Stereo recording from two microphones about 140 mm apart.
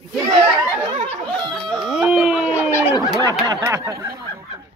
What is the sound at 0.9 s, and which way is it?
Snicker, 40° right (ahead or behind).